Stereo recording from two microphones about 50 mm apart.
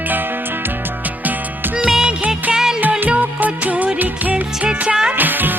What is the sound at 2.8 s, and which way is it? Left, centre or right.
Music, right.